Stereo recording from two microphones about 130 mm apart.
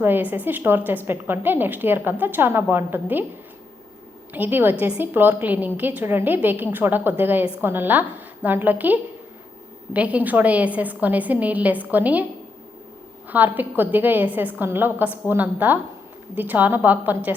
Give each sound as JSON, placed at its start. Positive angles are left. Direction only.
{"t": 0.0, "sound": "a woman's voice", "side_deg": -15}
{"t": 4.4, "sound": "a woman's voice", "side_deg": -15}
{"t": 13.2, "sound": "a woman's voice", "side_deg": -15}